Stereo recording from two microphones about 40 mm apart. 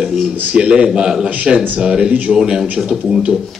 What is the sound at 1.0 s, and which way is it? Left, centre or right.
Speech, centre.